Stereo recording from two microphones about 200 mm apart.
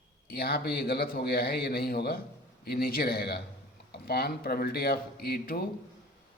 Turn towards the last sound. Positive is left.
turn(degrees=50)  # may be behind; listen again after turning